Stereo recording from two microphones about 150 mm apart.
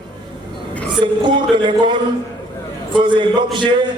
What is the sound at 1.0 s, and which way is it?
Speech, 30° right (ahead or behind).